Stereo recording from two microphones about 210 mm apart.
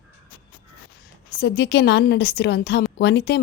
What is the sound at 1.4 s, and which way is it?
A woman's voice, 55° left (ahead or behind).